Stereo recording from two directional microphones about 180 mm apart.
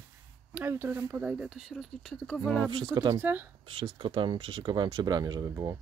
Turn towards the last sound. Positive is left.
turn(degrees=-20)  # may be behind; listen again after turning